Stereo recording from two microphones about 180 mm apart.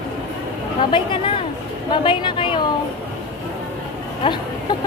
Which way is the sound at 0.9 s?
30° left (ahead or behind).